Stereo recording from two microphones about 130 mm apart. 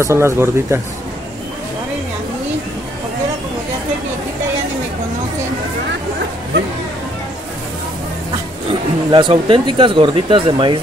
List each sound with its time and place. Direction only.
0.0 s speech: 20° right (ahead or behind)
9.1 s speech: 40° right (ahead or behind)